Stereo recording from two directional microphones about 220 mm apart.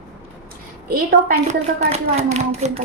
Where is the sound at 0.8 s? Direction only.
40° right (ahead or behind).